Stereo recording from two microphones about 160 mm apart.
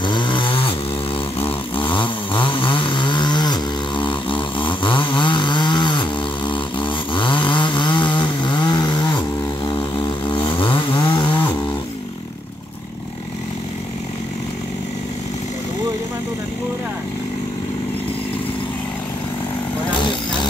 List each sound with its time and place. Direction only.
0.0 s chainsaw: 30° left (ahead or behind)